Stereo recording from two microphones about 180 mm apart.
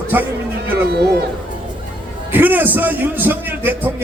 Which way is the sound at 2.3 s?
10° right (ahead or behind).